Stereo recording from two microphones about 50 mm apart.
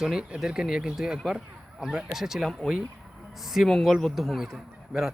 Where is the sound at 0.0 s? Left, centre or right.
Centre.